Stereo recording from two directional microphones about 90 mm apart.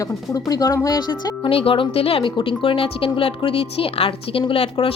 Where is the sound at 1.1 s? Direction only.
75° left (ahead or behind).